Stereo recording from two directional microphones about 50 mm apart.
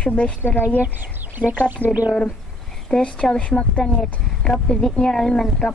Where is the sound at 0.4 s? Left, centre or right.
Left.